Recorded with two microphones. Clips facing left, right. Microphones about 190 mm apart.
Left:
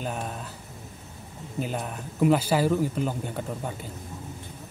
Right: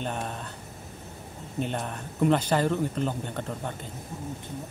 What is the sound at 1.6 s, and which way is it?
Speech, 5° left (ahead or behind).